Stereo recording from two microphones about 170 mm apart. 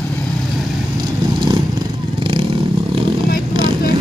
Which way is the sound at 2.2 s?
30° right (ahead or behind).